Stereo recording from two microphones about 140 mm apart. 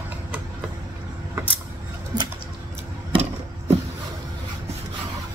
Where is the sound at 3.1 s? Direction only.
50° right (ahead or behind).